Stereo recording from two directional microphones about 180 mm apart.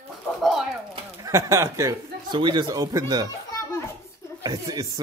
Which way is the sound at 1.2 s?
15° right (ahead or behind).